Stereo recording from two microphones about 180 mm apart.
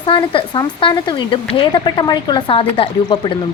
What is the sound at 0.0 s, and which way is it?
Speech, 30° left (ahead or behind).